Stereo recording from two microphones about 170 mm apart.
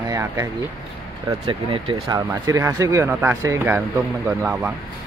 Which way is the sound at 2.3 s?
15° right (ahead or behind).